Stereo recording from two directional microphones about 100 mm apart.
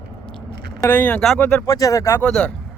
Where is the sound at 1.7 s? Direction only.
35° left (ahead or behind).